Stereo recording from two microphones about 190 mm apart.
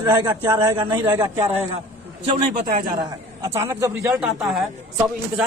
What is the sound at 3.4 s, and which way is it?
Speech, 15° right (ahead or behind).